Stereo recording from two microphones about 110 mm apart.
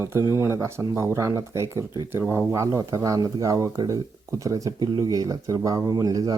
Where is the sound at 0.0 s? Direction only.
25° right (ahead or behind).